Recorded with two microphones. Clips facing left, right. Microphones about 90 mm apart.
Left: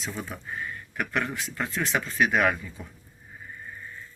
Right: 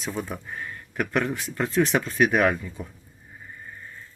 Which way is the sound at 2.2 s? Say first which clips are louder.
Right 2 dB; 25° right (ahead or behind).